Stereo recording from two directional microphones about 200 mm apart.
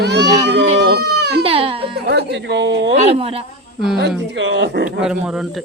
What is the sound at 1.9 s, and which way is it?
Speech, 55° right (ahead or behind).